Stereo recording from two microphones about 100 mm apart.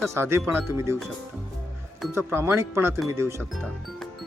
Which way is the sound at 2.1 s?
25° right (ahead or behind).